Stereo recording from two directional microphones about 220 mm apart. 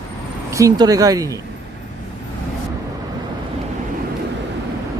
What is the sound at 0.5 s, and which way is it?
Speech, 15° right (ahead or behind).